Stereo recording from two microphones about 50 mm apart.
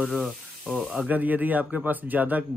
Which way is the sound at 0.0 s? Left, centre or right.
Centre.